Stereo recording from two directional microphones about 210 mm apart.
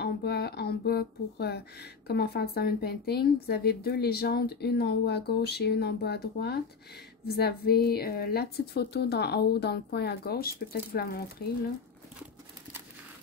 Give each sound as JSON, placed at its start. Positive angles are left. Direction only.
{"t": 0.0, "sound": "speech", "side_deg": 50}